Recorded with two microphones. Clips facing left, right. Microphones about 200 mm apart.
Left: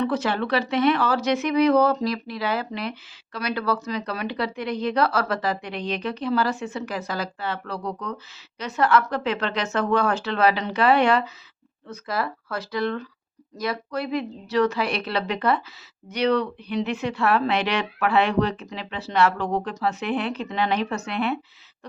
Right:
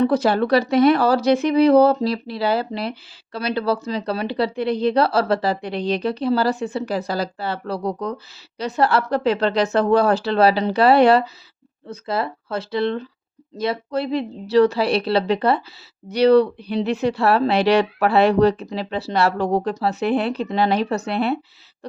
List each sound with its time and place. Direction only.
0.0 s speech: 35° right (ahead or behind)